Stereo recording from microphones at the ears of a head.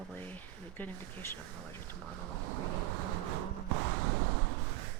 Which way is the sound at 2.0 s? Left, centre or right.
Right.